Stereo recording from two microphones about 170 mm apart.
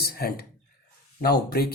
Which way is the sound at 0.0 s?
65° left (ahead or behind).